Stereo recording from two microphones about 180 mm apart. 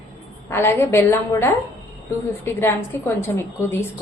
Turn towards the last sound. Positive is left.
turn(degrees=15)  # may be behind; listen again after turning